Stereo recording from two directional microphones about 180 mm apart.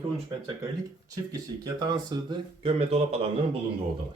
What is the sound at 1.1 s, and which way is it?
A man's voice, 20° right (ahead or behind).